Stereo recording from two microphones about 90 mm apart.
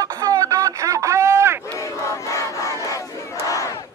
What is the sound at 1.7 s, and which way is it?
Battle cry, 35° left (ahead or behind).